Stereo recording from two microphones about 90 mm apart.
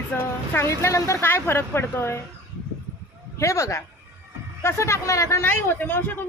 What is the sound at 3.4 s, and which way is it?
A woman's voice, 35° left (ahead or behind).